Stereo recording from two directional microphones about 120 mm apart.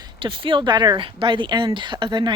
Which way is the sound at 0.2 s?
45° right (ahead or behind).